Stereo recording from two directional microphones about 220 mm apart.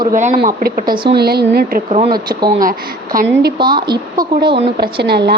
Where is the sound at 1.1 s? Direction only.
45° right (ahead or behind).